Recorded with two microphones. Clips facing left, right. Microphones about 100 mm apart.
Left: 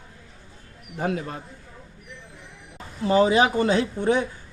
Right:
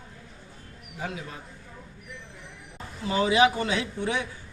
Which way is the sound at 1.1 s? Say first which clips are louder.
Left 10 dB; 55° left (ahead or behind).